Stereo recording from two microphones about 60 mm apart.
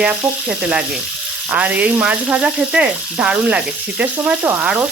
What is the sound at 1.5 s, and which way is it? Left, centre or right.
Speech, right.